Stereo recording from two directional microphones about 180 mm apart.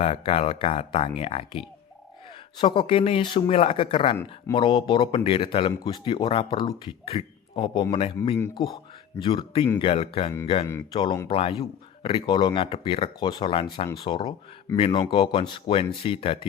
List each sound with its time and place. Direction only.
0.0 s speech: 35° left (ahead or behind)